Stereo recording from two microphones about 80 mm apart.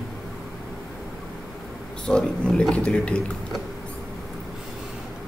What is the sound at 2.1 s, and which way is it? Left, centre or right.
A man's voice, centre.